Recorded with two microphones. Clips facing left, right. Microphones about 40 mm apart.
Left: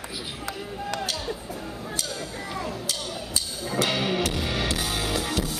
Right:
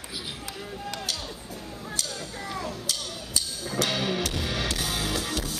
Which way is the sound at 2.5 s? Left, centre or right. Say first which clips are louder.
Left 1 dB; left.